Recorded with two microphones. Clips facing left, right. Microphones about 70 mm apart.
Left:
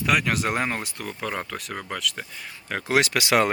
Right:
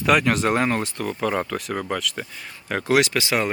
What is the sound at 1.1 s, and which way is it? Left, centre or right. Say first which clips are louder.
Speech: right 6 dB; centre.